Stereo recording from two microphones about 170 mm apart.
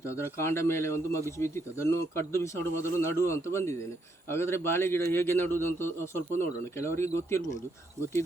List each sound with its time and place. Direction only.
0.0 s a man's voice: 15° left (ahead or behind)